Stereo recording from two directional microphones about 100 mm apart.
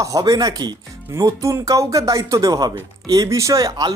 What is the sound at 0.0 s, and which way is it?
Speech, 35° right (ahead or behind).